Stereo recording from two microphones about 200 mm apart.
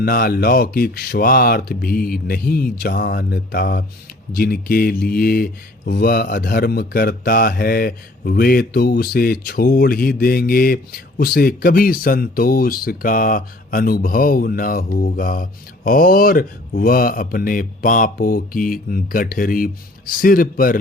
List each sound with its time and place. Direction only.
0.0 s speech: 50° left (ahead or behind)